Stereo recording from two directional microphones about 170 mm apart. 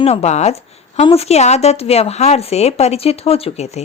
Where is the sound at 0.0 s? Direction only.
40° left (ahead or behind).